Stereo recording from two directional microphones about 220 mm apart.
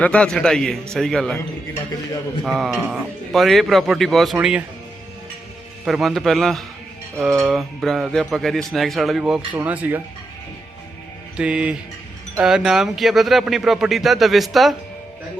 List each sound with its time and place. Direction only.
0.0 s speech: 5° left (ahead or behind)
2.4 s speech: centre (ahead or behind)
5.8 s speech: centre (ahead or behind)
11.3 s speech: 5° right (ahead or behind)